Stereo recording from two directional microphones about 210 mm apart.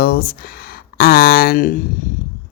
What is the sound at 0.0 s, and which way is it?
Speech, 45° left (ahead or behind).